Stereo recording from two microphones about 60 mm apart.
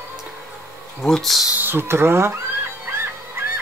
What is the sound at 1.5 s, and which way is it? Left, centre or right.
Speech, right.